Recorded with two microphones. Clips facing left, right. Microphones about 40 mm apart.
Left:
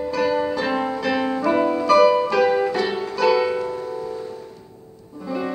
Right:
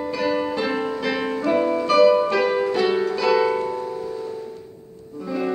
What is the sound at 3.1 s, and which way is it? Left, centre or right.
Music, centre.